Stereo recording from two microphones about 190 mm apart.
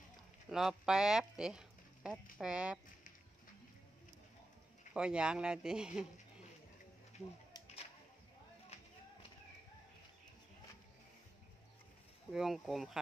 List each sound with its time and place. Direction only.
0.5 s speech: centre (ahead or behind)
4.9 s speech: 5° right (ahead or behind)
7.6 s a sound: 35° left (ahead or behind)
12.3 s speech: centre (ahead or behind)